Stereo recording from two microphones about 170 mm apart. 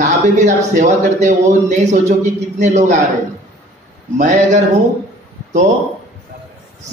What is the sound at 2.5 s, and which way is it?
Mantra, 45° right (ahead or behind).